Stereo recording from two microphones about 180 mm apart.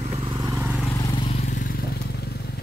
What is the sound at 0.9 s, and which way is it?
Vehicle, 20° left (ahead or behind).